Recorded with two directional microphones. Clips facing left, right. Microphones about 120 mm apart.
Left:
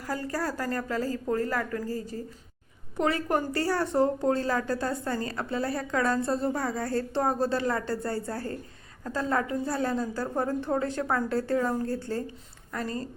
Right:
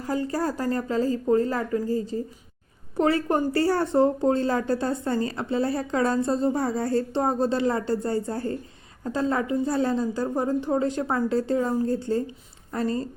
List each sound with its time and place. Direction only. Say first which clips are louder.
0.0 s a woman's voice: right 5 dB; 25° right (ahead or behind)